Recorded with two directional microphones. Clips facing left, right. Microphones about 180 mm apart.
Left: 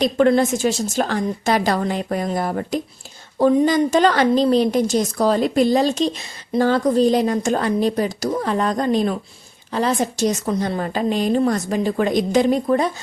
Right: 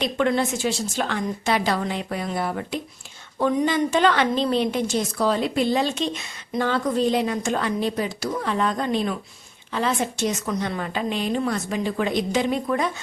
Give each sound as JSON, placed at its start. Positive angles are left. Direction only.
{"t": 0.0, "sound": "a woman's voice", "side_deg": 40}